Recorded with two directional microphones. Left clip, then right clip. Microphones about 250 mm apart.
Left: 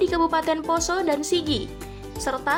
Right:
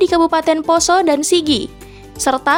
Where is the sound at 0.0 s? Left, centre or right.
Right.